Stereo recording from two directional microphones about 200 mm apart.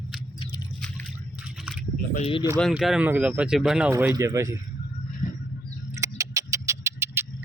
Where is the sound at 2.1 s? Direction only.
30° left (ahead or behind).